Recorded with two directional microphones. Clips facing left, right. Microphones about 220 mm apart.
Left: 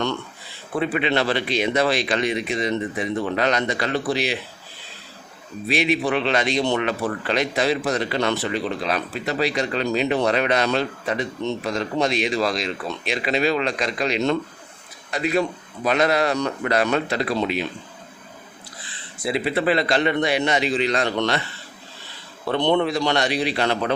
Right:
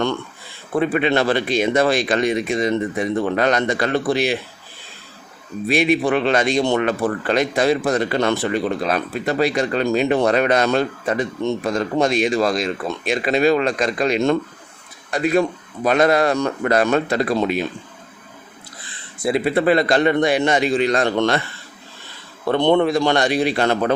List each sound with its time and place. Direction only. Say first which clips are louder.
0.8 s speech: right 4 dB; 50° right (ahead or behind)
5.6 s speech: right 4 dB; 50° right (ahead or behind)
19.2 s speech: right 4 dB; 50° right (ahead or behind)
22.4 s speech: right 4 dB; 50° right (ahead or behind)